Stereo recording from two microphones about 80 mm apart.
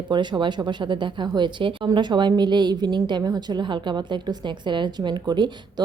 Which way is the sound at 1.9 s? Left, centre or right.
Right.